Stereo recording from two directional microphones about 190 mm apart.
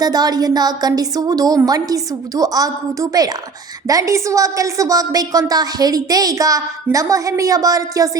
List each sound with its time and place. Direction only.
0.0 s a woman's voice: 20° right (ahead or behind)